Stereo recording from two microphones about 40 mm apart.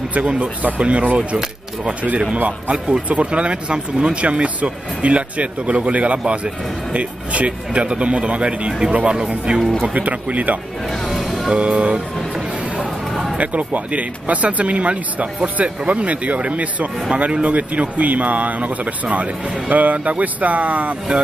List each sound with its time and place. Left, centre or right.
0.1 s speech: right
9.9 s speech: right
13.4 s speech: right